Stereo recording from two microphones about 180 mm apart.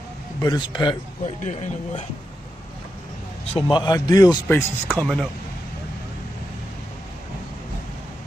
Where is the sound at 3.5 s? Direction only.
25° left (ahead or behind).